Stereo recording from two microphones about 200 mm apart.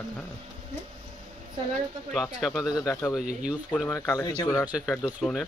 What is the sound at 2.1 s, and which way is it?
Speech, centre (ahead or behind).